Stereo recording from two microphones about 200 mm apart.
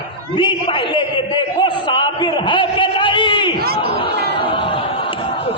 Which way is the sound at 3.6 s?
50° right (ahead or behind).